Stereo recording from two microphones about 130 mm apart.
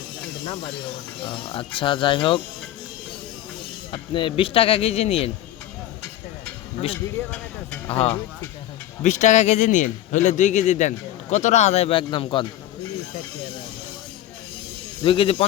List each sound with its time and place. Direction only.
1.2 s speech: 40° left (ahead or behind)
3.9 s speech: 40° left (ahead or behind)
7.9 s speech: 50° left (ahead or behind)
9.0 s a man's voice: 70° left (ahead or behind); by 12.5 s 40° left (ahead or behind)
15.0 s speech: 45° left (ahead or behind)